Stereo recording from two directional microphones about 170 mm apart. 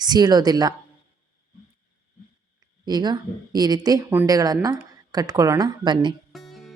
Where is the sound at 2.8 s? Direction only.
25° right (ahead or behind).